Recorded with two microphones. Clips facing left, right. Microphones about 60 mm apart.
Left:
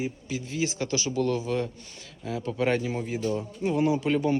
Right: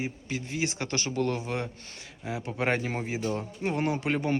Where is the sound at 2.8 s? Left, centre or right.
Right.